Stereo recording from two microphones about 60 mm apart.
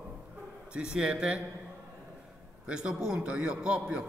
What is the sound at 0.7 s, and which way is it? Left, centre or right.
Speech, centre.